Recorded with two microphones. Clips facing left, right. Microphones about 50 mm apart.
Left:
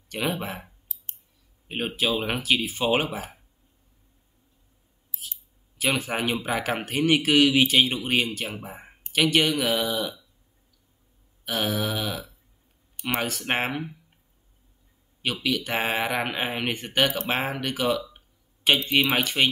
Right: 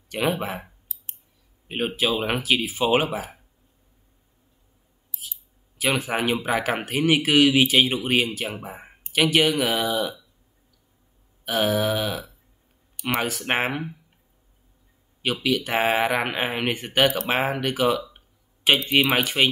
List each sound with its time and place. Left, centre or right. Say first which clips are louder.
0.1 s speech: right 4 dB; centre
1.7 s speech: right 2 dB; centre
5.8 s speech: right 2 dB; centre
11.4 s speech: right 5 dB; centre
15.2 s speech: right 3 dB; centre
18.1 s a sound: even; centre
19.0 s speech: right 2 dB; centre